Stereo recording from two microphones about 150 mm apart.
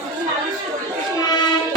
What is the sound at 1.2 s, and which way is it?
Music, 30° left (ahead or behind).